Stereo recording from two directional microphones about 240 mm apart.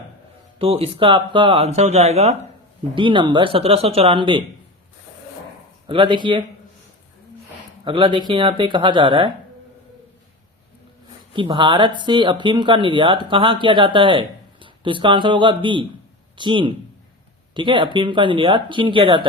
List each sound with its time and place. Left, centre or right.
0.6 s speech: right
5.9 s speech: centre
7.9 s speech: centre
11.3 s speech: centre